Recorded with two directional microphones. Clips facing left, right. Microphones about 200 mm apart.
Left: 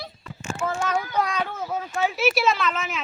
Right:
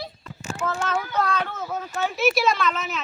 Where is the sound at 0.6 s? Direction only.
10° left (ahead or behind).